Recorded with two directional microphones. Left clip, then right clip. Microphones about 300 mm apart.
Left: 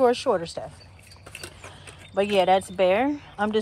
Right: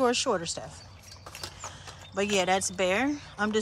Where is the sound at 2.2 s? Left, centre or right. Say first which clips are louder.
Left 6 dB; centre.